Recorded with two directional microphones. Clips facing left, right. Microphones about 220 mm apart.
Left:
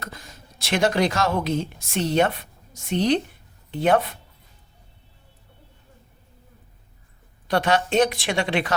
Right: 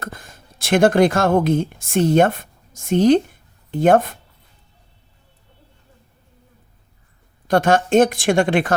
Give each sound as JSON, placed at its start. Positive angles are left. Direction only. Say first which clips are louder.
{"t": 0.0, "sound": "a woman's voice", "louder": "right 5 dB", "side_deg": -50}
{"t": 7.4, "sound": "a woman's voice", "louder": "right 5 dB", "side_deg": -45}